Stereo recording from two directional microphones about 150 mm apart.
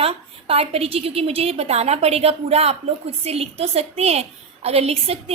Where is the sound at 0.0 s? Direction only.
40° right (ahead or behind).